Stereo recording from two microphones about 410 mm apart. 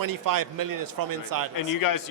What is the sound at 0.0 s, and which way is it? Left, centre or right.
A man's voice, right.